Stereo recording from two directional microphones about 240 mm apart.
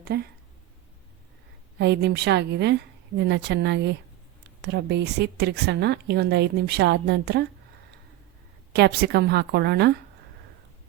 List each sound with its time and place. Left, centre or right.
0.0 s speech: right
1.8 s a woman's voice: right
8.7 s a woman's voice: right